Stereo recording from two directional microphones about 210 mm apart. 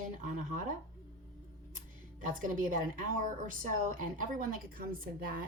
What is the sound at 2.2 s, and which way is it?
Speech, 40° right (ahead or behind).